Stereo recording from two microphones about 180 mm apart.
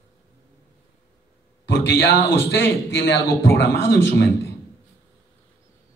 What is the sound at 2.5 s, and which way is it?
A man's voice, 75° left (ahead or behind).